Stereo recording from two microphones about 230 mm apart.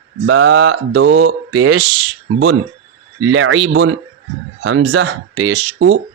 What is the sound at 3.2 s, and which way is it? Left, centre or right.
Speech, right.